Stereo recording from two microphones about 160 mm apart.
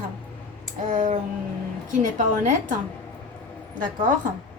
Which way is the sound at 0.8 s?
50° right (ahead or behind).